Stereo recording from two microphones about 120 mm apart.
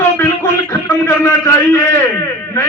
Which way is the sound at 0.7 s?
20° left (ahead or behind).